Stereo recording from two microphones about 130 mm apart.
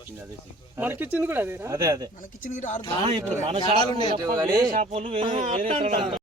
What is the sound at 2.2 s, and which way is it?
Speech, 85° left.